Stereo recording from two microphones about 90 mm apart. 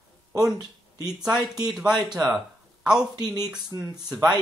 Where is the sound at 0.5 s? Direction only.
45° right (ahead or behind).